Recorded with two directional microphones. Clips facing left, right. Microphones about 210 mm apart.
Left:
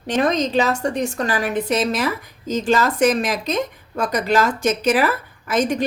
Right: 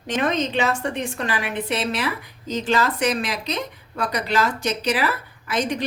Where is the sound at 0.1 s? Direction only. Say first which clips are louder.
Left 4 dB; 40° left (ahead or behind).